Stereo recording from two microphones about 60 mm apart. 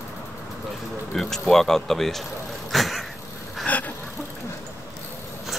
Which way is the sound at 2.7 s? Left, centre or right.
Centre.